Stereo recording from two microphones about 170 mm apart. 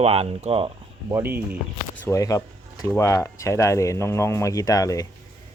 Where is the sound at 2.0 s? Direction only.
20° left (ahead or behind).